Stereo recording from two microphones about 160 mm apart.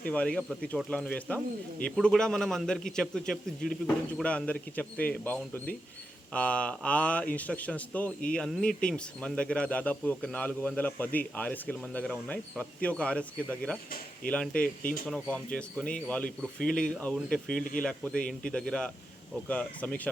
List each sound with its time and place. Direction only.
0.0 s a man's voice: 10° left (ahead or behind)
17.6 s speech: 60° left (ahead or behind)
17.8 s a man's voice: 5° left (ahead or behind)